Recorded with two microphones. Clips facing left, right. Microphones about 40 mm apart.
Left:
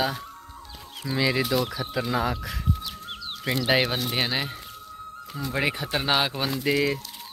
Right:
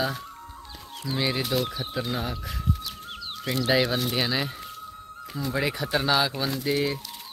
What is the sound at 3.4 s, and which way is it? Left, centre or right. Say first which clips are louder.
Speech: left 1 dB; left.